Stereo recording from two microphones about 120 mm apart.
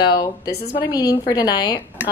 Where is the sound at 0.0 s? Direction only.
40° left (ahead or behind).